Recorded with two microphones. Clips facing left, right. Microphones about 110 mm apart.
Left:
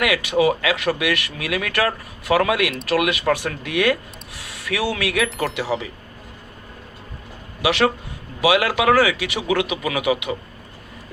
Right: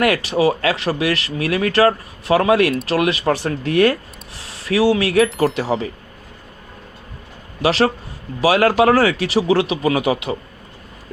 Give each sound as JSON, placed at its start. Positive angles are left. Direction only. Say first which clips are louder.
{"t": 0.0, "sound": "speech", "louder": "right 2 dB", "side_deg": -40}
{"t": 4.4, "sound": "speech", "louder": "right 7 dB", "side_deg": -30}
{"t": 7.6, "sound": "speech", "louder": "right 2 dB", "side_deg": -35}